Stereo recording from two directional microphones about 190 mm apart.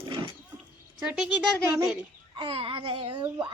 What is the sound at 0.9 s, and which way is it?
Speech, 5° right (ahead or behind).